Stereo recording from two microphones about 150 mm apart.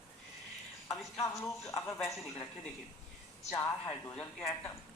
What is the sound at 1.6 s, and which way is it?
Speech, 20° left (ahead or behind).